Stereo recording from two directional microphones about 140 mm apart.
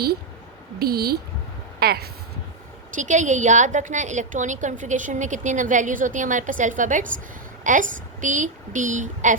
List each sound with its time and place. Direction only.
0.8 s speech: 90° right
2.9 s a woman's voice: 60° right (ahead or behind)